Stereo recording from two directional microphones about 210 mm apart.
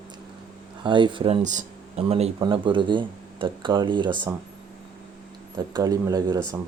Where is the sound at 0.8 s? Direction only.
20° right (ahead or behind).